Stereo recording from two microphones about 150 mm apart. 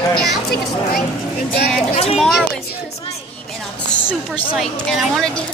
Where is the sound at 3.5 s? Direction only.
5° left (ahead or behind).